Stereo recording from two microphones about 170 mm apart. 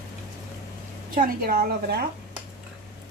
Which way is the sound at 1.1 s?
55° right (ahead or behind).